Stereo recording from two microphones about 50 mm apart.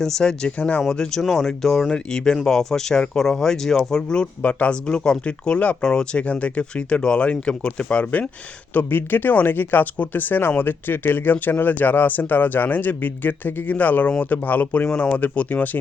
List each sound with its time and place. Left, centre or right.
0.0 s speech: centre
5.8 s speech: centre
6.2 s speech: left
8.7 s speech: left